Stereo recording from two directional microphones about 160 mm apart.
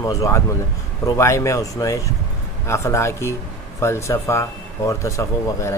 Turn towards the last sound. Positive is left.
turn(degrees=20)  # may be behind; listen again after turning